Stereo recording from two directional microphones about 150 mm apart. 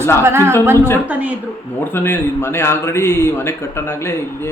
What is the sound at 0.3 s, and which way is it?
Speech, 15° right (ahead or behind).